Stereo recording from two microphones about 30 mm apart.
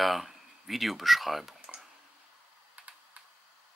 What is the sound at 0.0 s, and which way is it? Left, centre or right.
Speech, centre.